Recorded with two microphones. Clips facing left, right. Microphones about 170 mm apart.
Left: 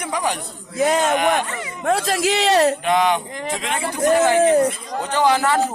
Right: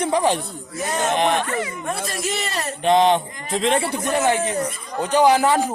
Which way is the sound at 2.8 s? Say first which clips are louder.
Right 2 dB; 25° right (ahead or behind).